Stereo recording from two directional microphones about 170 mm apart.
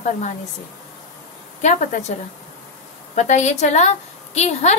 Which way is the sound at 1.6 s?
45° left (ahead or behind).